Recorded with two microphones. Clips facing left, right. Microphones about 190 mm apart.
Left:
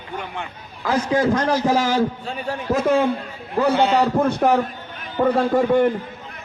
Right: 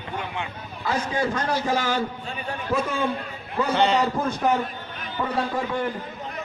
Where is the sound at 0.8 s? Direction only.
90° left.